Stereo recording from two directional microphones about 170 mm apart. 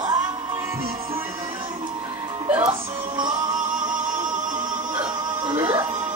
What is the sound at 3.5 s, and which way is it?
Music, 50° right (ahead or behind).